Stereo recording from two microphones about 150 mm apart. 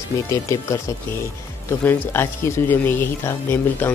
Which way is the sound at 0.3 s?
20° left (ahead or behind).